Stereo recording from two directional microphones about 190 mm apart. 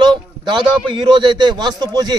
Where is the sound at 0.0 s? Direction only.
25° right (ahead or behind).